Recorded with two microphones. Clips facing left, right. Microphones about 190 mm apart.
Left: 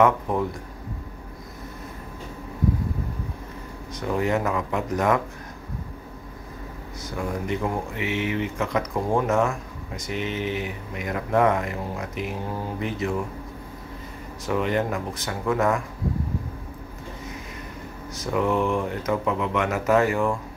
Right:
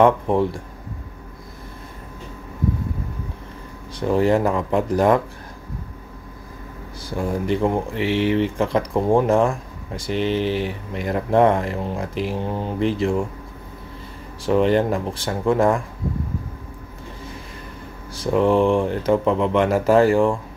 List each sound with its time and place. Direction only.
0.0 s speech: 30° right (ahead or behind)
3.9 s speech: 30° right (ahead or behind)
7.0 s speech: 30° right (ahead or behind)
14.4 s speech: 30° right (ahead or behind)
18.1 s speech: 30° right (ahead or behind)